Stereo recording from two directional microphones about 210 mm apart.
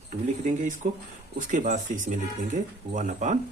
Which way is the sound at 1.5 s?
35° right (ahead or behind).